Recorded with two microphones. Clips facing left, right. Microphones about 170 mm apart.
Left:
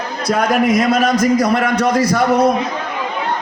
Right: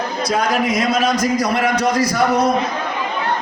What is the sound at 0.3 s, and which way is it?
A man's voice, 55° left (ahead or behind).